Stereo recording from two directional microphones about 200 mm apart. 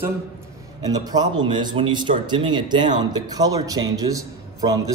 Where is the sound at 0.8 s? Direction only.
20° right (ahead or behind).